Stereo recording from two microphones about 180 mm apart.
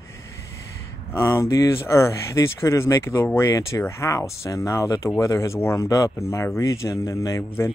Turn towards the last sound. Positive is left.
turn(degrees=15)  # may be behind; listen again after turning